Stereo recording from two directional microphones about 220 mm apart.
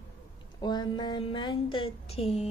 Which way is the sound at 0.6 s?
20° left (ahead or behind).